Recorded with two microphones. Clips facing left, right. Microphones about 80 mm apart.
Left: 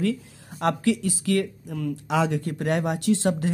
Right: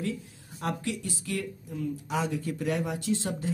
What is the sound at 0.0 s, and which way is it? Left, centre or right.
Speech, left.